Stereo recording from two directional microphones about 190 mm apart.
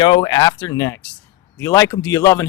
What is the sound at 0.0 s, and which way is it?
Speech, 25° left (ahead or behind).